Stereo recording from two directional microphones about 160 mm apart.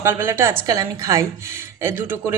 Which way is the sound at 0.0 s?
15° right (ahead or behind).